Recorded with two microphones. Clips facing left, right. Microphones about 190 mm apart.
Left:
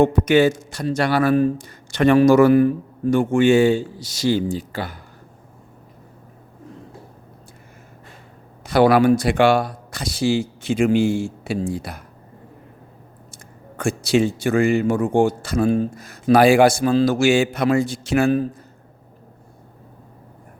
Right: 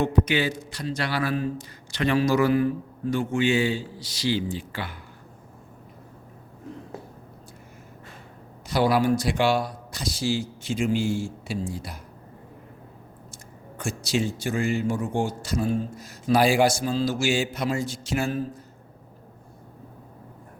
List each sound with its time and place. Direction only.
0.0 s a man's voice: 50° left (ahead or behind)
8.6 s speech: 60° left (ahead or behind)
13.7 s speech: 60° left (ahead or behind)